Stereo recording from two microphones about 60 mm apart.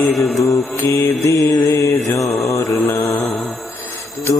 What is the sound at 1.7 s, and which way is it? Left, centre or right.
Mantra, left.